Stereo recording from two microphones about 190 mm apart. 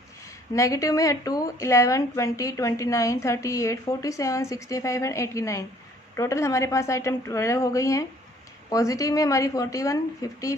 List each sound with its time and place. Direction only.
0.6 s a woman's voice: 15° left (ahead or behind)